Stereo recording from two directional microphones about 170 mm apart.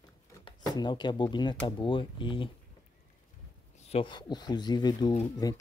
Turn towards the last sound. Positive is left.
turn(degrees=20)  # may be behind; listen again after turning